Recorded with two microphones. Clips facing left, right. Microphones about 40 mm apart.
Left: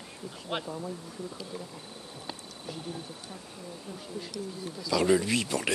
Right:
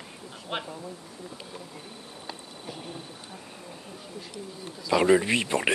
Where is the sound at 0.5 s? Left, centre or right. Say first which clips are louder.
Right 1 dB; centre.